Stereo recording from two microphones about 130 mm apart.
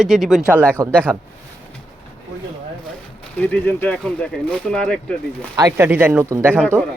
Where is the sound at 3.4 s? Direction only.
15° left (ahead or behind).